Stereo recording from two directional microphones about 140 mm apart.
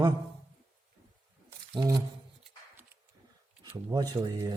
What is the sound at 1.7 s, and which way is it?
Speech, 25° right (ahead or behind).